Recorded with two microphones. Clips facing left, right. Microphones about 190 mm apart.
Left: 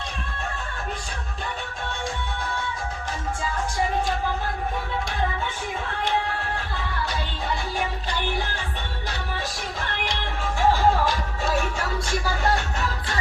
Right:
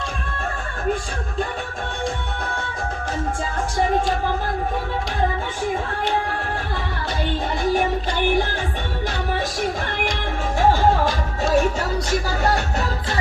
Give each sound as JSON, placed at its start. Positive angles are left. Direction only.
{"t": 9.9, "sound": "music", "side_deg": -45}